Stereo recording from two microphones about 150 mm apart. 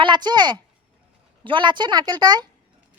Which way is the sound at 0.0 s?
30° right (ahead or behind).